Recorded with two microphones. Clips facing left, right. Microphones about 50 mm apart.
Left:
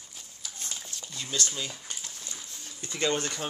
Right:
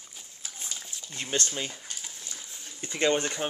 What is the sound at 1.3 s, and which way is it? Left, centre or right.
Speech, right.